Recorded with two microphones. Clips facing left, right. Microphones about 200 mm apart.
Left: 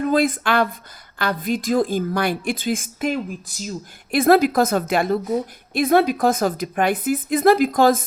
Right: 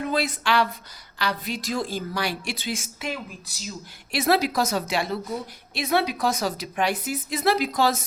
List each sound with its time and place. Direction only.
0.0 s a woman's voice: 50° left (ahead or behind)